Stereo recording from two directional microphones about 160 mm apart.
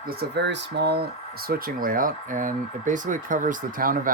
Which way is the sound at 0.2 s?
90° right.